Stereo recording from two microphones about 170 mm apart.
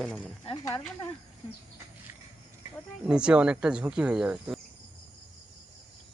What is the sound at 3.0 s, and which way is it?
Speech, 5° right (ahead or behind).